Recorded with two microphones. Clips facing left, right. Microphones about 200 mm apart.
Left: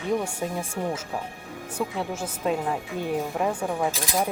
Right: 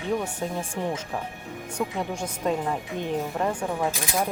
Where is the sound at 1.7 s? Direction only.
5° left (ahead or behind).